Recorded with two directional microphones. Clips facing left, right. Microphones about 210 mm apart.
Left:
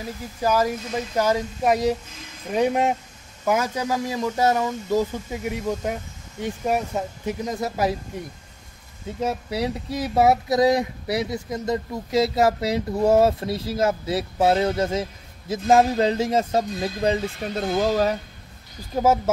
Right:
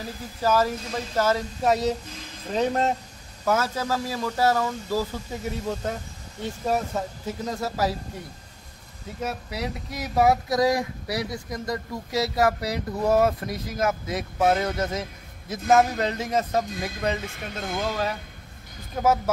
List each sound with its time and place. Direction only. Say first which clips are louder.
0.4 s speech: left 1 dB; 15° left (ahead or behind)
9.2 s speech: left 5 dB; 30° left (ahead or behind)
18.9 s speech: left 3 dB; 25° left (ahead or behind)